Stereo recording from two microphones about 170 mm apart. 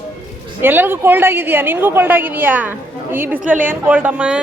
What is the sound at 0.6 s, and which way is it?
A woman's voice, 10° right (ahead or behind).